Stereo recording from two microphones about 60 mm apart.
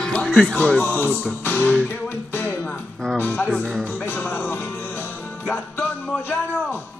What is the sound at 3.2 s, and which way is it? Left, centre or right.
Speech, left.